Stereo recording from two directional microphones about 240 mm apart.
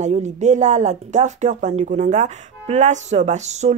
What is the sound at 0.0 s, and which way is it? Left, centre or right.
Speech, right.